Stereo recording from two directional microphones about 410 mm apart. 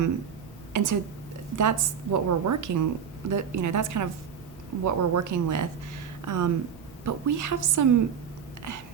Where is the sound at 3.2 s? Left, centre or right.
Right.